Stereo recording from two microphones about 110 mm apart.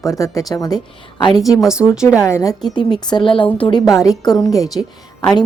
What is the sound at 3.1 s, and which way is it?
Speech, 45° left (ahead or behind).